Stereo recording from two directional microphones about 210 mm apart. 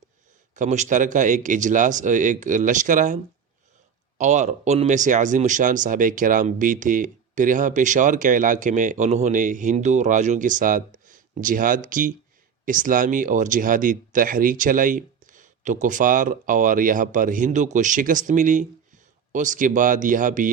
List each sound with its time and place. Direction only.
0.5 s speech: 35° right (ahead or behind)
4.2 s speech: 35° right (ahead or behind)